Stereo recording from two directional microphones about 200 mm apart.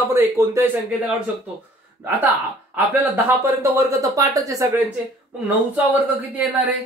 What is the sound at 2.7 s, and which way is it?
Speech, 10° right (ahead or behind).